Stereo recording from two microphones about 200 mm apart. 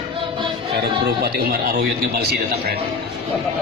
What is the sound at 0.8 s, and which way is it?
Speech, 50° right (ahead or behind).